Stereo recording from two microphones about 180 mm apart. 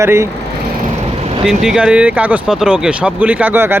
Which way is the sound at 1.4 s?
5° right (ahead or behind).